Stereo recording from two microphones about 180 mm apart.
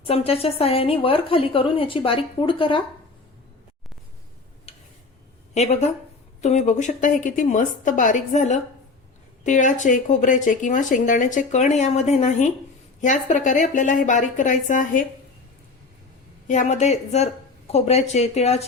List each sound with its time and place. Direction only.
0.0 s a woman's voice: 35° left (ahead or behind)
4.7 s a sound: 35° left (ahead or behind)
5.5 s a woman's voice: 35° left (ahead or behind)
16.5 s a woman's voice: 40° left (ahead or behind)